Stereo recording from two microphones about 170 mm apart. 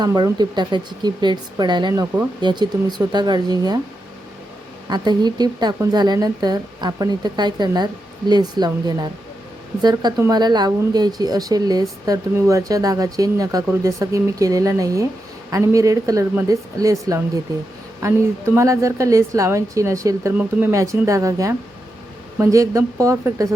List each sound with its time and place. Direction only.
0.0 s speech: 25° right (ahead or behind)
4.9 s a woman's voice: 25° right (ahead or behind)